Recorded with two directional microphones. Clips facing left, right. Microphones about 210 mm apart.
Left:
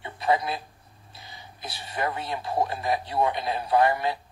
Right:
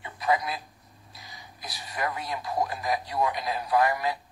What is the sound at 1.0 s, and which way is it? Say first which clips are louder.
Speech: left 2 dB; 30° left (ahead or behind).